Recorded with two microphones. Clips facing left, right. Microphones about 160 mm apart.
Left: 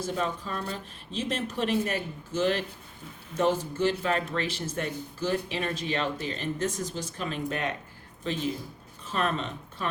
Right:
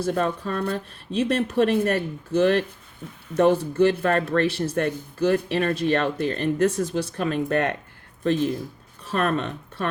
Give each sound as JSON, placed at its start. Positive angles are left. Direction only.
{"t": 0.0, "sound": "speech", "side_deg": -60}